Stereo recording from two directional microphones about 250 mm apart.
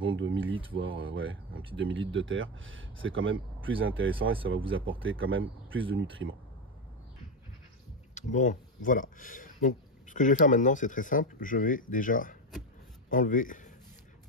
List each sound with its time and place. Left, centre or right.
0.0 s speech: right
8.1 s speech: left